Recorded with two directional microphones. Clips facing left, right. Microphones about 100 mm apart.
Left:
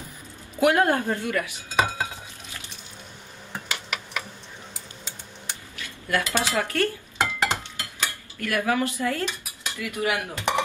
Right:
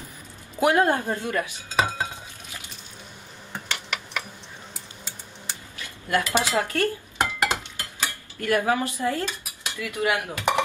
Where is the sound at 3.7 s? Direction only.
5° left (ahead or behind).